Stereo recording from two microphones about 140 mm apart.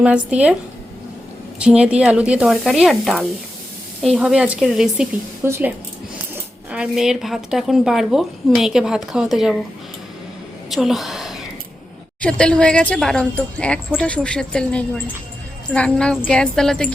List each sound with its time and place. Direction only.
0.0 s speech: 10° right (ahead or behind)
1.5 s speech: 10° right (ahead or behind)
5.4 s speech: 15° right (ahead or behind)
10.7 s a woman's voice: centre (ahead or behind)